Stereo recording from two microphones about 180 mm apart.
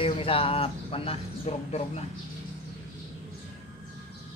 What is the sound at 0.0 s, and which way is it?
Speech, 30° left (ahead or behind).